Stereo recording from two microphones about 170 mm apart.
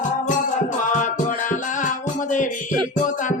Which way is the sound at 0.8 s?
50° left (ahead or behind).